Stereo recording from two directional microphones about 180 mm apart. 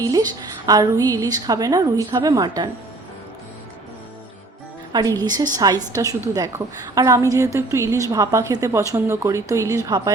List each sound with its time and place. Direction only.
0.0 s a woman's voice: 20° right (ahead or behind)
4.9 s a woman's voice: 20° right (ahead or behind)